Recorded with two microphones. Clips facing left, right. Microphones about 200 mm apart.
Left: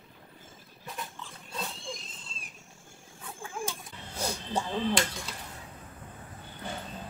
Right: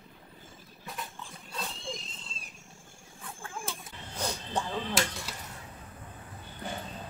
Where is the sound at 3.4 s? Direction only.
10° left (ahead or behind).